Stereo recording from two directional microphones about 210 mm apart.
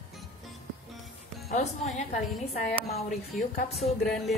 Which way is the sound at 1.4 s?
30° left (ahead or behind).